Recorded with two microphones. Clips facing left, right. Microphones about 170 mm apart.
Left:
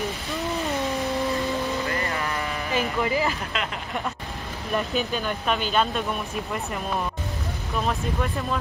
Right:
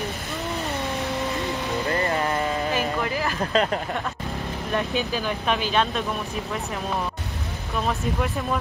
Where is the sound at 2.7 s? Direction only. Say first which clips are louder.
Left 1 dB; 15° left (ahead or behind).